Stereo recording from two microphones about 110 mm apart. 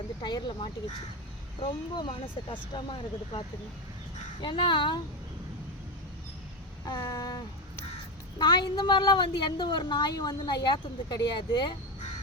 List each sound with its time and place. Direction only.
0.2 s a woman's voice: 40° left (ahead or behind)
7.0 s a sound: 25° left (ahead or behind)
8.4 s a woman's voice: 45° left (ahead or behind)